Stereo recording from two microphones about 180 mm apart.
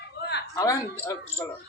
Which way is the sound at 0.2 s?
70° left (ahead or behind).